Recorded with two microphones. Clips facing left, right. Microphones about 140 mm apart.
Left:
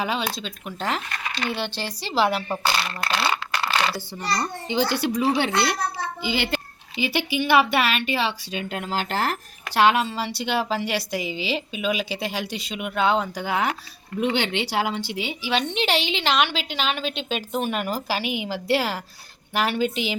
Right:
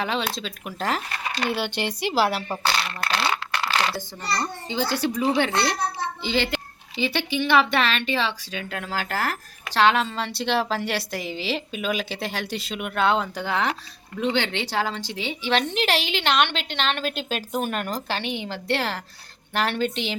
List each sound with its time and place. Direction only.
0.0 s a woman's voice: 5° left (ahead or behind)
1.7 s speech: 20° right (ahead or behind)
2.2 s a woman's voice: centre (ahead or behind)
3.8 s a sound: centre (ahead or behind)
4.7 s speech: 15° left (ahead or behind)
8.7 s speech: 20° left (ahead or behind)
9.7 s a woman's voice: 5° left (ahead or behind)